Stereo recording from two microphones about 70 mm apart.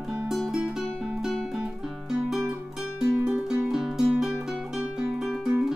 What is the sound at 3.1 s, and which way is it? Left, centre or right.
Music, right.